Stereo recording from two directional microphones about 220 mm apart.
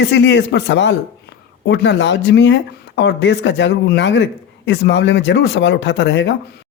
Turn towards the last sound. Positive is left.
turn(degrees=55)  # may be behind; listen again after turning